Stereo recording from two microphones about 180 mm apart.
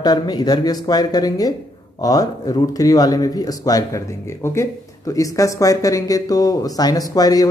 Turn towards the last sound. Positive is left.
turn(degrees=20)  # may be behind; listen again after turning